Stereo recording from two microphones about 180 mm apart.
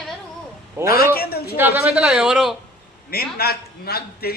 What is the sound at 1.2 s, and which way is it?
Speech, 60° left (ahead or behind).